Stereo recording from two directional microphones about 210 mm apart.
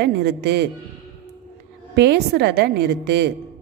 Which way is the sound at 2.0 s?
55° right (ahead or behind).